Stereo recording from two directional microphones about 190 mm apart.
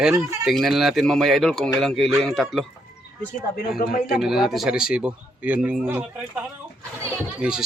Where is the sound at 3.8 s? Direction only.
50° left (ahead or behind).